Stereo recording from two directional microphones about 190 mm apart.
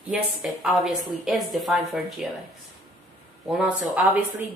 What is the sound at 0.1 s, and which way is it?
Speech, centre (ahead or behind).